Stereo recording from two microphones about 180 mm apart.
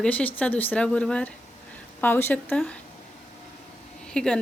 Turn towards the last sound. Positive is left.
turn(degrees=5)  # may be behind; listen again after turning